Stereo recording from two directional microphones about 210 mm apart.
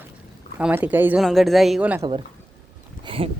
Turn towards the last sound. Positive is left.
turn(degrees=-25)  # may be behind; listen again after turning